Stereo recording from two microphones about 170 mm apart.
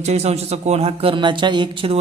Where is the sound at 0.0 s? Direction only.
40° right (ahead or behind).